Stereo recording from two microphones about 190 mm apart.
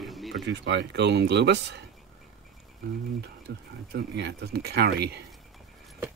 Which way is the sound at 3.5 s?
65° right (ahead or behind).